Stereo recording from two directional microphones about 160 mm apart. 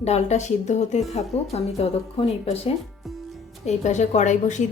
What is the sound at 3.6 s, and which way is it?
Speech, 45° left (ahead or behind).